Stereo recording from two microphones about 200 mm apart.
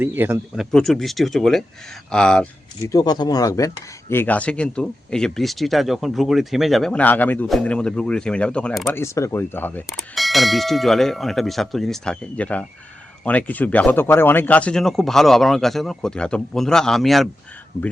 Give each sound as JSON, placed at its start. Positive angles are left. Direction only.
{"t": 0.0, "sound": "speech", "side_deg": -10}
{"t": 2.8, "sound": "speech", "side_deg": 20}
{"t": 9.0, "sound": "speech", "side_deg": 15}